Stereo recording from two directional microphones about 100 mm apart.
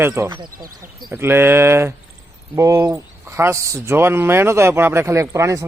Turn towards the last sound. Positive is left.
turn(degrees=-30)  # may be behind; listen again after turning